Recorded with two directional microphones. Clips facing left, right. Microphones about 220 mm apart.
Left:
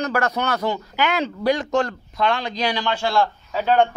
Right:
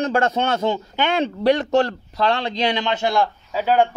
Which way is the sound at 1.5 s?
60° right (ahead or behind).